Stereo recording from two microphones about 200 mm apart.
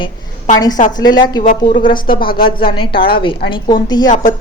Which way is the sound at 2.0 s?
45° left (ahead or behind).